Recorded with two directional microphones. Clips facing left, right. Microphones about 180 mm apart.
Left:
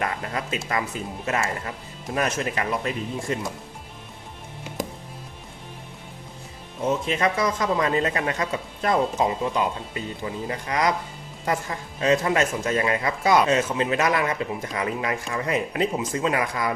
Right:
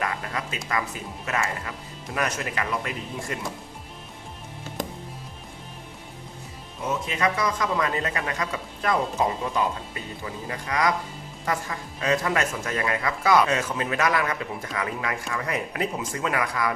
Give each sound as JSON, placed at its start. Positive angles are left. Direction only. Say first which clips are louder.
{"t": 0.0, "sound": "a man's voice", "louder": "left 2 dB", "side_deg": 30}
{"t": 6.8, "sound": "a man's voice", "louder": "left 3 dB", "side_deg": 30}
{"t": 10.2, "sound": "a man's voice", "louder": "left 2 dB", "side_deg": 25}